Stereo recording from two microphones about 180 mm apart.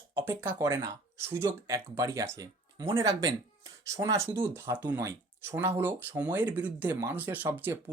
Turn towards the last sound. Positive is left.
turn(degrees=-10)  # may be behind; listen again after turning